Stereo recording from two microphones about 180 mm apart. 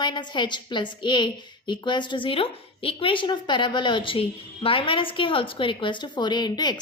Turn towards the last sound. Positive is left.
turn(degrees=25)  # may be behind; listen again after turning